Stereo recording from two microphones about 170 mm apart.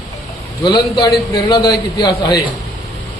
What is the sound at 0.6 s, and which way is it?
A man's voice, 25° left (ahead or behind).